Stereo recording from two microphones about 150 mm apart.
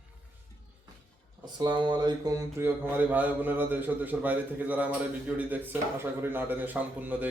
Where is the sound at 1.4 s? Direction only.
30° right (ahead or behind).